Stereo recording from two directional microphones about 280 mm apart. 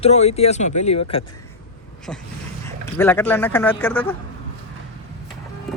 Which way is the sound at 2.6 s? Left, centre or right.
Centre.